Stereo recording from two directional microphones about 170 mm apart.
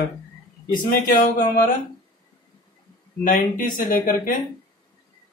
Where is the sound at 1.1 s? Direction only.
50° left (ahead or behind).